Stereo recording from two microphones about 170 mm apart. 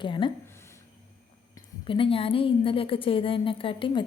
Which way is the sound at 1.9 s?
30° left (ahead or behind).